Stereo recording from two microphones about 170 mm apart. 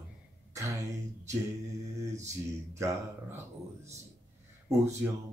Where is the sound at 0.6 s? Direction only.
20° right (ahead or behind).